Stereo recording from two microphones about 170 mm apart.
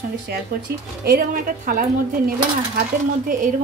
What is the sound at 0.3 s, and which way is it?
A woman's voice, 70° right (ahead or behind).